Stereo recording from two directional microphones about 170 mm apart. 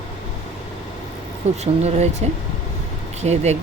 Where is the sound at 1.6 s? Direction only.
40° right (ahead or behind).